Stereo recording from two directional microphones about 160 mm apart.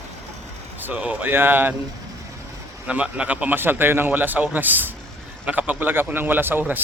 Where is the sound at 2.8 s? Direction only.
10° right (ahead or behind).